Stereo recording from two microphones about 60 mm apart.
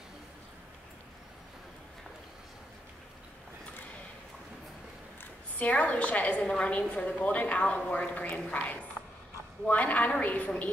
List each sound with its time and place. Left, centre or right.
5.6 s a woman's voice: left